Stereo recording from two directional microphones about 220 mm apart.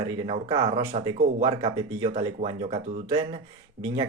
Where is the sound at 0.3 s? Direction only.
20° right (ahead or behind).